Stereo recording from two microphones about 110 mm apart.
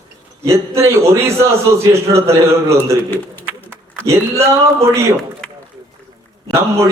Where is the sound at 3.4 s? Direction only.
20° right (ahead or behind).